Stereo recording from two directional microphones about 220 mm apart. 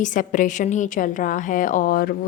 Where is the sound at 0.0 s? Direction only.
35° left (ahead or behind).